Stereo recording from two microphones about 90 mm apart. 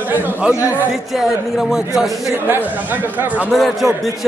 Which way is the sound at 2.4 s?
20° right (ahead or behind).